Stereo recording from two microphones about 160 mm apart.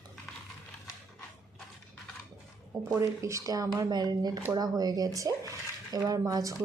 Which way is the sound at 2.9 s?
20° right (ahead or behind).